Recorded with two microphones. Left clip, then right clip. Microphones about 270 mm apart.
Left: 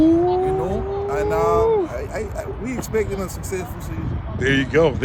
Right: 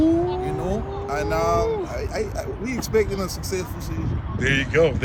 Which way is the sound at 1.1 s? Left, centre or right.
Centre.